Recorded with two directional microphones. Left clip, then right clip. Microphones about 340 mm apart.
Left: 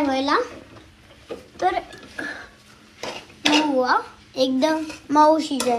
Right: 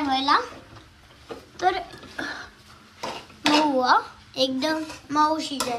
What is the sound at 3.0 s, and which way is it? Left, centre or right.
A child's voice, centre.